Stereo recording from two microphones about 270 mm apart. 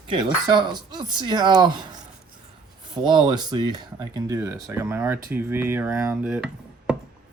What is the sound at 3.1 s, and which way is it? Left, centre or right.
Speech, centre.